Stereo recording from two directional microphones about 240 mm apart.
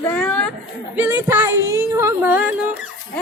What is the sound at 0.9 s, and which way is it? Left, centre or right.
Speech, centre.